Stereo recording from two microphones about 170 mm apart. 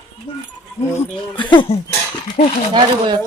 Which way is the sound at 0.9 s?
10° left (ahead or behind).